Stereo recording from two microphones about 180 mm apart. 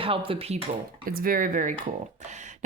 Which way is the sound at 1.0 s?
55° right (ahead or behind).